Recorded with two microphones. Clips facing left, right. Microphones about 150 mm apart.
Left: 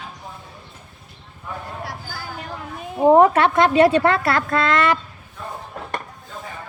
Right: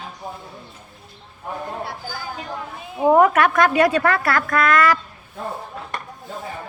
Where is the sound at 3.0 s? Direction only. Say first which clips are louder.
Left 2 dB; 30° left (ahead or behind).